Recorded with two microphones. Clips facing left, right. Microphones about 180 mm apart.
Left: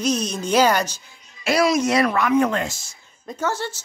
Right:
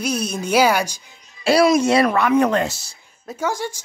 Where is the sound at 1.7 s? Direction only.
30° right (ahead or behind).